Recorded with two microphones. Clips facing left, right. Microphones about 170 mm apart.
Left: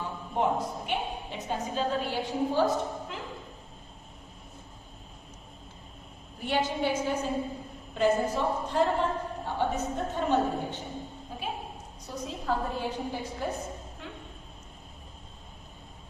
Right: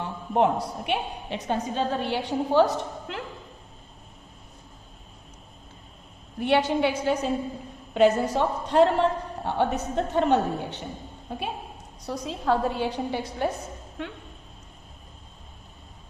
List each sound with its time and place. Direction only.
0.0 s a woman's voice: 75° right (ahead or behind)
6.4 s a woman's voice: 70° right (ahead or behind)
11.3 s a sound: 70° right (ahead or behind)
12.0 s a woman's voice: 75° right (ahead or behind)